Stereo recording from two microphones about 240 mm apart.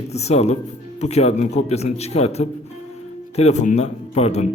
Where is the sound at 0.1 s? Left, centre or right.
Left.